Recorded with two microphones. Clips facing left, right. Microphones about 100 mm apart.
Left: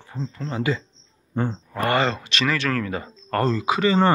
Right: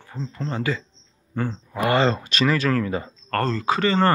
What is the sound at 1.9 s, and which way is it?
Speech, 25° right (ahead or behind).